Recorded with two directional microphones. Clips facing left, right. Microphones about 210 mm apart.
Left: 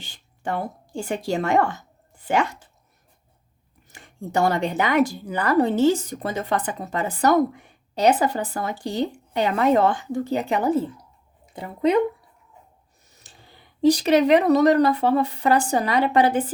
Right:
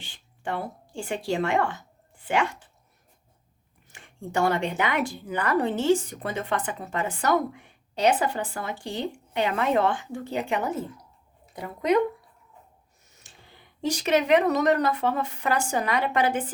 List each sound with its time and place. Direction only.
0.0 s speech: 40° left (ahead or behind)
3.8 s speech: 40° left (ahead or behind)
13.1 s speech: 35° left (ahead or behind)